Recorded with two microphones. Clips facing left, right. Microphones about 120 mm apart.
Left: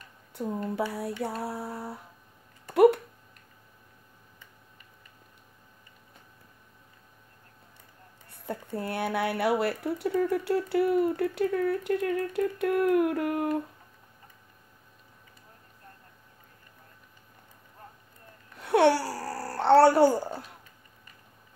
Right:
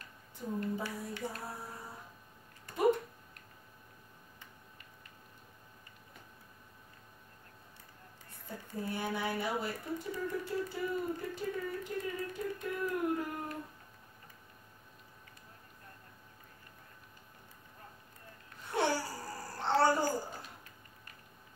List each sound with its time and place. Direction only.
0.3 s speech: 70° left (ahead or behind)
8.3 s speech: 70° left (ahead or behind)
18.6 s a sound: 70° left (ahead or behind)